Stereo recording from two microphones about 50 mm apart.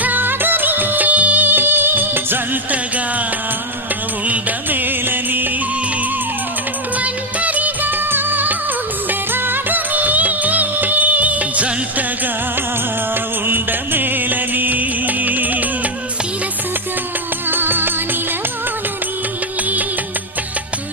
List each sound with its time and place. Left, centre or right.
0.0 s music of bollywood: right
4.3 s music: right
7.0 s music: right
13.5 s music: right
17.5 s music: right